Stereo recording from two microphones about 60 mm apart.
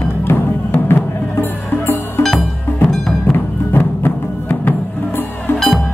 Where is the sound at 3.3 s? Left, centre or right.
Left.